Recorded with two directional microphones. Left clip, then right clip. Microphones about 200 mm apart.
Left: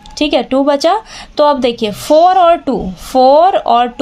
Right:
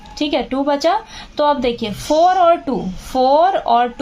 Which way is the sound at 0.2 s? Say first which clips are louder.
Left 7 dB; 45° left (ahead or behind).